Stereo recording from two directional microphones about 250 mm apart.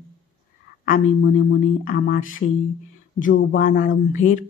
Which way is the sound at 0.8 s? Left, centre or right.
Left.